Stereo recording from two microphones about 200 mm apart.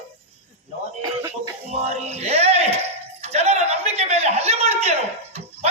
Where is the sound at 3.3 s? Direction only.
30° right (ahead or behind).